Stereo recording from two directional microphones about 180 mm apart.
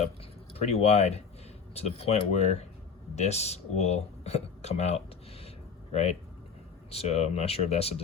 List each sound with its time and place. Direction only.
0.5 s speech: 35° left (ahead or behind)